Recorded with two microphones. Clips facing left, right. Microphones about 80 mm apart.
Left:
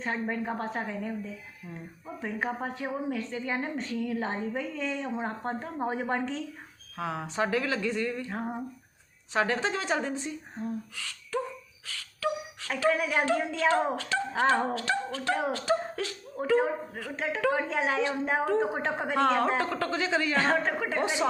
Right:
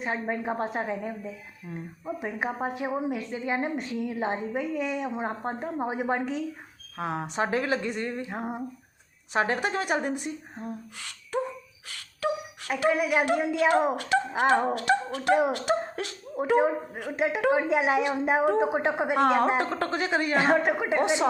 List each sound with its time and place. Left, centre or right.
0.0 s a woman's voice: centre
6.9 s speech: right
12.2 s speech: right